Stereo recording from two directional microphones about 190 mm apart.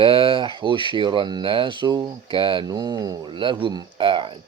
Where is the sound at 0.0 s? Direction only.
25° right (ahead or behind).